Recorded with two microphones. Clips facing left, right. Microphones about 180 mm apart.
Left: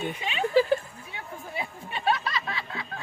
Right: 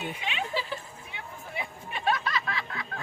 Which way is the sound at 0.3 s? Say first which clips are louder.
Left 11 dB; 35° left (ahead or behind).